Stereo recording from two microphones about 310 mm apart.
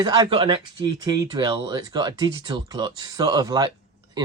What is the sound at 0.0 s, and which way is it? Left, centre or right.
Speech, centre.